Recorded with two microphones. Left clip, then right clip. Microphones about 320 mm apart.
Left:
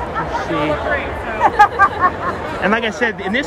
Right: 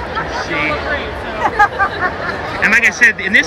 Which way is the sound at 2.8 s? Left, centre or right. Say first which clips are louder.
Right 8 dB; centre.